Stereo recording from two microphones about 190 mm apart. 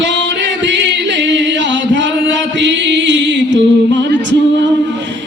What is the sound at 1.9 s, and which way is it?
Chant, 70° right (ahead or behind).